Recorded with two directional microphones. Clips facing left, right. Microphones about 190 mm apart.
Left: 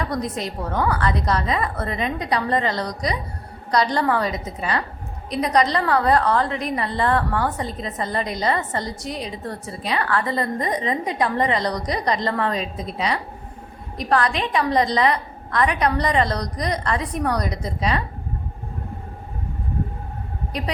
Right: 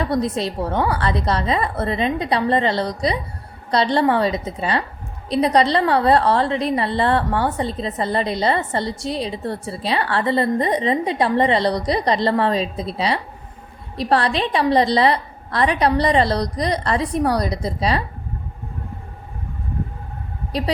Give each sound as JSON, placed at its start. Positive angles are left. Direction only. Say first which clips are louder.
{"t": 0.0, "sound": "a woman's voice", "louder": "right 5 dB", "side_deg": -30}
{"t": 20.5, "sound": "speech", "louder": "right 5 dB", "side_deg": -30}